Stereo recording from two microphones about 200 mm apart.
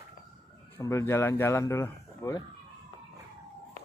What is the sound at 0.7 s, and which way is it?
Speech, 15° left (ahead or behind).